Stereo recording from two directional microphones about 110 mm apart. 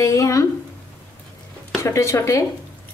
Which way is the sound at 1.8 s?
25° left (ahead or behind).